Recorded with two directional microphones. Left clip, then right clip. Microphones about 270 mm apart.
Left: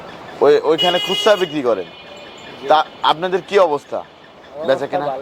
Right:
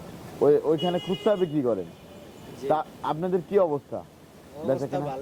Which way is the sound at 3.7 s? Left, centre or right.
Left.